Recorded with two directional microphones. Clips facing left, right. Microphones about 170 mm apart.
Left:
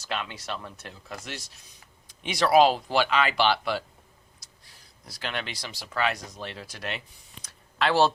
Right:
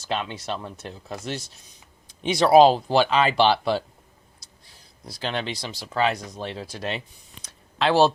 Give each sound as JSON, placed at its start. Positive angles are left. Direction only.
{"t": 0.0, "sound": "speech", "side_deg": -25}
{"t": 5.0, "sound": "speech", "side_deg": -30}
{"t": 7.8, "sound": "speech", "side_deg": -15}